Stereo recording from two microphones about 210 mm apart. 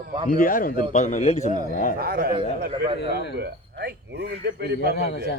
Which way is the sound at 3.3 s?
50° right (ahead or behind).